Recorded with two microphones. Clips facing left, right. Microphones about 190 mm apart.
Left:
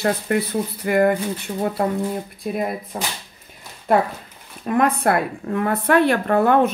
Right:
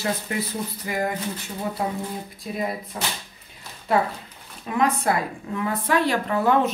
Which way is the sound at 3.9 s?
55° left (ahead or behind).